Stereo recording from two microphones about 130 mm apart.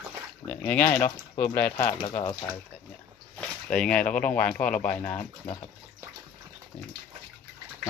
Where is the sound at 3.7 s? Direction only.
5° left (ahead or behind).